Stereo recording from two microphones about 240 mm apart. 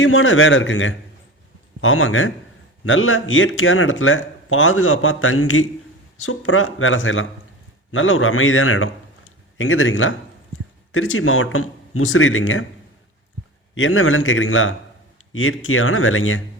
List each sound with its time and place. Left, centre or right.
0.0 s speech: left
13.7 s speech: left